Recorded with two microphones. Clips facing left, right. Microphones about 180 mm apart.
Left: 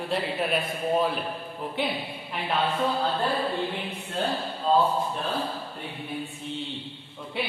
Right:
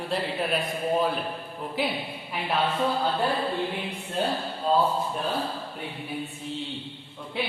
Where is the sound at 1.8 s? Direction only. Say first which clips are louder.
Right 1 dB; centre (ahead or behind).